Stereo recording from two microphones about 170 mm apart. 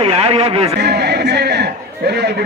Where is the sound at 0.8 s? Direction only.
75° right (ahead or behind).